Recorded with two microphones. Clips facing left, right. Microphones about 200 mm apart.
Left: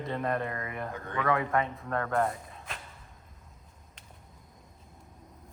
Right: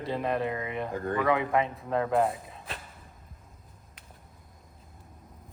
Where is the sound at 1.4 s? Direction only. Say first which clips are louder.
Right 2 dB; 20° right (ahead or behind).